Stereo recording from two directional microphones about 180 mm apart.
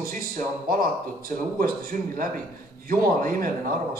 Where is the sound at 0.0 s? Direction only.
50° right (ahead or behind).